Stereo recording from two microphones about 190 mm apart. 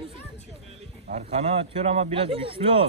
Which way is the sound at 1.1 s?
35° right (ahead or behind).